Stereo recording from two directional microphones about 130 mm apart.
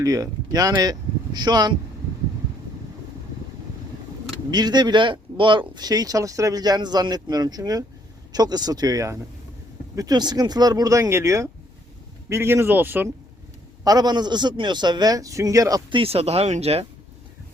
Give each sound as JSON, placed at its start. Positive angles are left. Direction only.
{"t": 0.0, "sound": "speech", "side_deg": -25}
{"t": 4.5, "sound": "speech", "side_deg": -30}
{"t": 13.8, "sound": "speech", "side_deg": -30}
{"t": 15.9, "sound": "speech", "side_deg": -45}